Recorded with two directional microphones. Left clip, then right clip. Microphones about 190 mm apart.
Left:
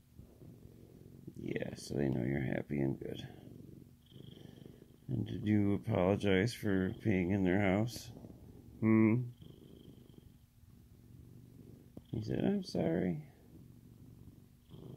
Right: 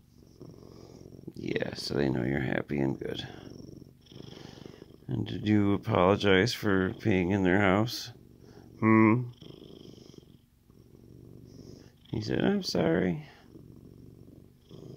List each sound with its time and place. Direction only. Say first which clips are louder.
1.4 s speech: right 8 dB; 25° right (ahead or behind)
4.2 s purr: right 9 dB; 20° right (ahead or behind)
5.1 s speech: right 7 dB; 25° right (ahead or behind)
12.2 s speech: right 8 dB; 30° right (ahead or behind)